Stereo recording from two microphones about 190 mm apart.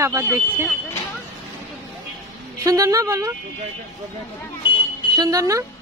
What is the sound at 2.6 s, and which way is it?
Speech, 15° right (ahead or behind).